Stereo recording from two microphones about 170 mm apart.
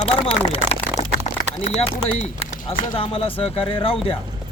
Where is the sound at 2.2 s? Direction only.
40° left (ahead or behind).